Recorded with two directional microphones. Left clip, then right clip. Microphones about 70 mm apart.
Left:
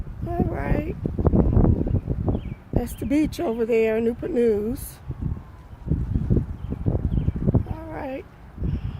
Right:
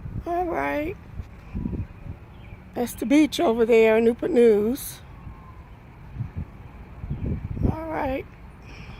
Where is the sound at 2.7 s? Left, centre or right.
Right.